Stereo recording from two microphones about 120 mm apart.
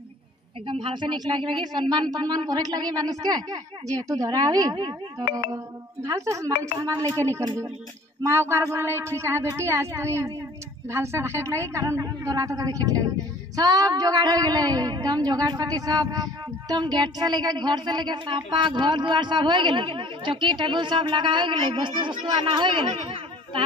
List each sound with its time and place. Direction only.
0.7 s a woman's voice: 45° right (ahead or behind)